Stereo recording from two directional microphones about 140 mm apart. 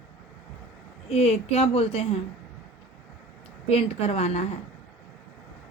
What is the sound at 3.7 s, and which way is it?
Speech, 45° left (ahead or behind).